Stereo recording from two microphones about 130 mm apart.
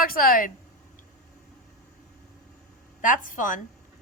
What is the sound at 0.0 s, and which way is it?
Speech, 90° left.